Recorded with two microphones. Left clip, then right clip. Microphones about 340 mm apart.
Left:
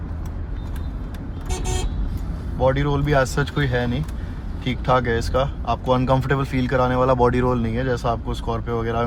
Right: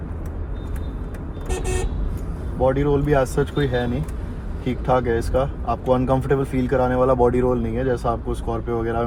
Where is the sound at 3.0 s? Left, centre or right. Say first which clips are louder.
Right 1 dB; left.